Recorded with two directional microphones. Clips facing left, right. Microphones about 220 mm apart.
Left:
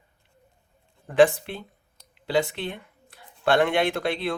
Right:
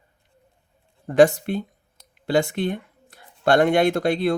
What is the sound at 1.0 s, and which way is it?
Speech, 40° right (ahead or behind).